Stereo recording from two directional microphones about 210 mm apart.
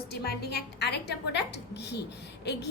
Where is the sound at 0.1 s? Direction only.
50° left (ahead or behind).